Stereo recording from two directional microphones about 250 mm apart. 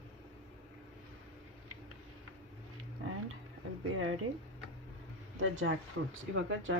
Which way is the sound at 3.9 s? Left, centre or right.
Right.